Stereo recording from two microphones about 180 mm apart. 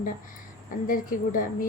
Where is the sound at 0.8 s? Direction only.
50° left (ahead or behind).